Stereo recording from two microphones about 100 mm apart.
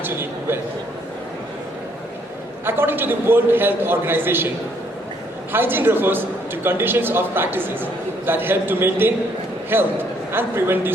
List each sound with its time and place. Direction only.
0.0 s a sound: 20° right (ahead or behind)
2.6 s a man's voice: 20° right (ahead or behind)
5.5 s a man's voice: 20° right (ahead or behind)